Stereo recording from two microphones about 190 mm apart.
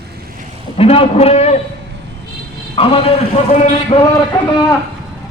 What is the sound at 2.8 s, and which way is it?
A man's voice, 30° left (ahead or behind).